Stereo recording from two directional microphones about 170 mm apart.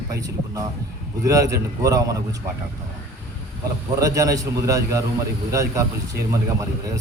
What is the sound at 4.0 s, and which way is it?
Speech, 20° right (ahead or behind).